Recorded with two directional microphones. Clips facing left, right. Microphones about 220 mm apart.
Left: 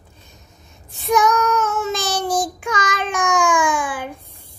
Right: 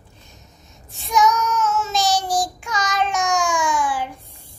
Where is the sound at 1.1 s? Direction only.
55° left (ahead or behind).